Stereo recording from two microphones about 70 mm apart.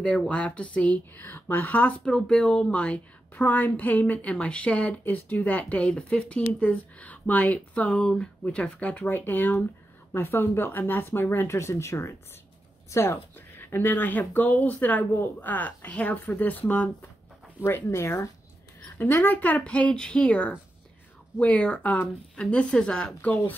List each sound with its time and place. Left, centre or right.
0.6 s a woman's voice: centre
2.0 s speech: centre
3.3 s a woman's voice: left
13.6 s a woman's voice: left
17.6 s speech: left
18.9 s a woman's voice: left; by 23.3 s centre